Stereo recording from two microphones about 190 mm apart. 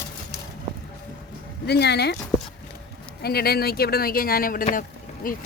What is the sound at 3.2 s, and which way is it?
Speech, 55° left (ahead or behind).